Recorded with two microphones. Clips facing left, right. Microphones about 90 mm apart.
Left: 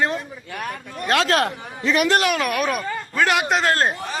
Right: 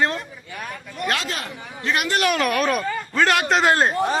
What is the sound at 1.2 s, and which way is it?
Speech, 70° left (ahead or behind).